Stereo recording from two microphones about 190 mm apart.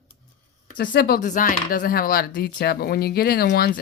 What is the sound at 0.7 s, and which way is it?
Speech, 55° left (ahead or behind).